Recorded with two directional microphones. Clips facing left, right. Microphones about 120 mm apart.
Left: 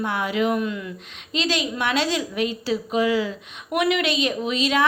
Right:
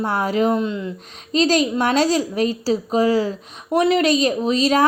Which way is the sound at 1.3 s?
40° right (ahead or behind).